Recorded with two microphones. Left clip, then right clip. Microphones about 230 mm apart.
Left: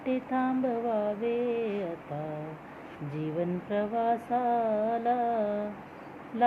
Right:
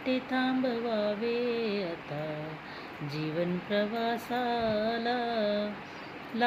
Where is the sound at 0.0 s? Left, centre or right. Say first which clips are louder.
Even; right.